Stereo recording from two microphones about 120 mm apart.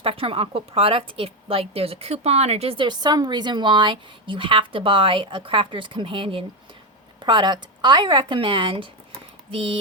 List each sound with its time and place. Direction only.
0.0 s a woman's voice: 50° right (ahead or behind)